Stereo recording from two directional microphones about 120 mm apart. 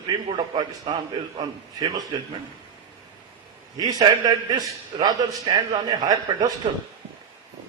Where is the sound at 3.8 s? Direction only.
35° right (ahead or behind).